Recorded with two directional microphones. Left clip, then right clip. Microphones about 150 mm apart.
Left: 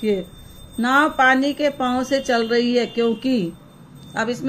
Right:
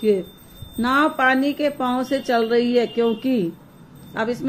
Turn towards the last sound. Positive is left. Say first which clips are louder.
# left 1 dB
turn(degrees=40)  # may be behind; listen again after turning